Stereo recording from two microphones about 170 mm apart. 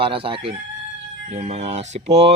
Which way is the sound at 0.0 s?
30° right (ahead or behind).